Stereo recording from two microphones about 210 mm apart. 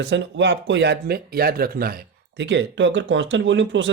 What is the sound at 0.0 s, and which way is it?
Speech, 55° right (ahead or behind).